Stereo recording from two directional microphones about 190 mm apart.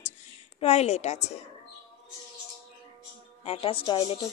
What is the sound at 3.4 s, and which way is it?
Speech, 30° left (ahead or behind).